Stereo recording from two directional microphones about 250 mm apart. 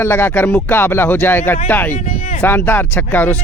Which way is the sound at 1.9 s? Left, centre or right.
Left.